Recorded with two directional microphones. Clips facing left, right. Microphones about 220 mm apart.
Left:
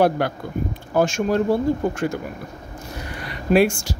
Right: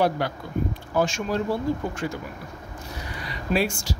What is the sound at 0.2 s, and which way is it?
Speech, 55° left (ahead or behind).